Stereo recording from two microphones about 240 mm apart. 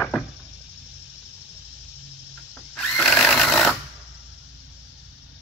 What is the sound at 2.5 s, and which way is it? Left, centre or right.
Sewing machine, centre.